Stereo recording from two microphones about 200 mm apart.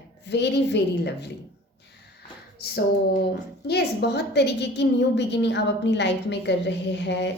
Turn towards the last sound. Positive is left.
turn(degrees=60)  # may be behind; listen again after turning